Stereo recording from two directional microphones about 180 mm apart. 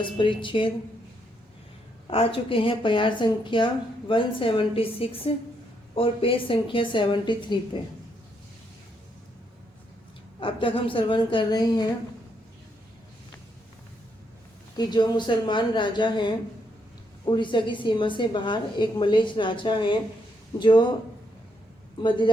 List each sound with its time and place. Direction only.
0.0 s a woman's voice: 25° left (ahead or behind)
2.0 s a woman's voice: 30° left (ahead or behind)
10.4 s a woman's voice: 30° left (ahead or behind)
14.8 s a woman's voice: 25° left (ahead or behind)